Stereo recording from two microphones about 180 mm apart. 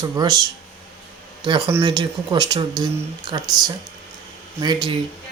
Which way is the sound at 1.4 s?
30° right (ahead or behind).